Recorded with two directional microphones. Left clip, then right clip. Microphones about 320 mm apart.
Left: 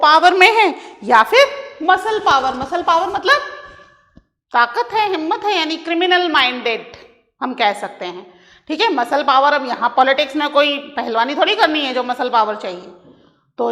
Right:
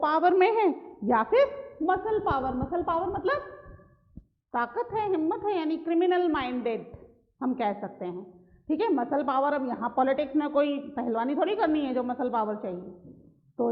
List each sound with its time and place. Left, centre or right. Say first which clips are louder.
0.0 s a woman's voice: left 13 dB; centre